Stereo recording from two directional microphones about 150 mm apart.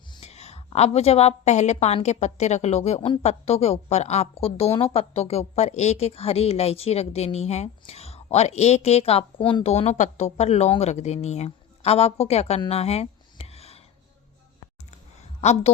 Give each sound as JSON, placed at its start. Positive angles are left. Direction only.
{"t": 0.2, "sound": "a woman's voice", "side_deg": 45}
{"t": 15.4, "sound": "a woman's voice", "side_deg": 50}